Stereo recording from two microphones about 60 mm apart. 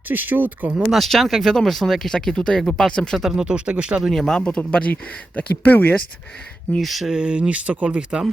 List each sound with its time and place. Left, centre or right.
0.1 s speech: right
0.9 s speech: centre
3.2 s speech: centre
3.4 s speech: centre
4.0 s speech: centre
4.3 s a man's voice: centre
6.8 s speech: centre
7.2 s speech: centre